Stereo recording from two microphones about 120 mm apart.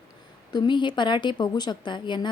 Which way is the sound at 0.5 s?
40° left (ahead or behind).